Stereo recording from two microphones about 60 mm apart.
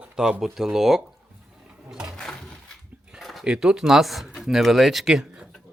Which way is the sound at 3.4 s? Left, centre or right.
Centre.